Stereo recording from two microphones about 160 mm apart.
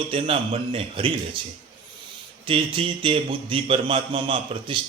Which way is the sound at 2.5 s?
35° right (ahead or behind).